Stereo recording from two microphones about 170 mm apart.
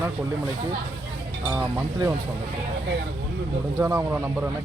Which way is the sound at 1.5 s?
15° right (ahead or behind).